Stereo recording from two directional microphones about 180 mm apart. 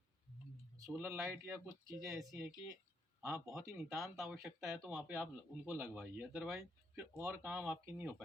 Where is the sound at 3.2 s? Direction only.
15° right (ahead or behind).